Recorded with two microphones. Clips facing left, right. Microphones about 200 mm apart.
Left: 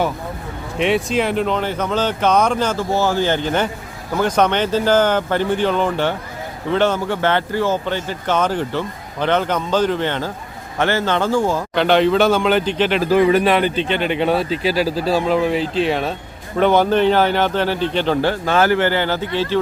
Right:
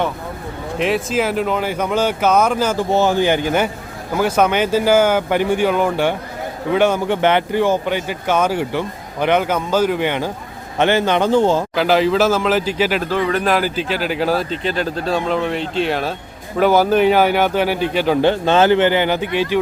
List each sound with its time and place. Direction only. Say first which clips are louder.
0.8 s speech: left 1 dB; centre (ahead or behind)
2.9 s speech: right 3 dB; 20° right (ahead or behind)
11.7 s speech: left 1 dB; 5° right (ahead or behind)
13.1 s a man's voice: left 5 dB; 10° left (ahead or behind)
13.4 s speech: left 2 dB; centre (ahead or behind)
18.2 s speech: right 5 dB; 20° right (ahead or behind)